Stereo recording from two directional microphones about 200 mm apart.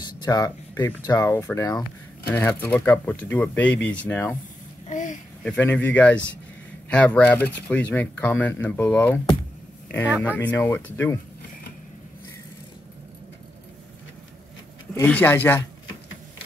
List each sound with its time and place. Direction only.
0.2 s speech: 20° left (ahead or behind)
4.8 s a sound: 40° left (ahead or behind)
5.4 s speech: 5° left (ahead or behind)
10.2 s speech: 10° left (ahead or behind)
15.0 s speech: 10° left (ahead or behind)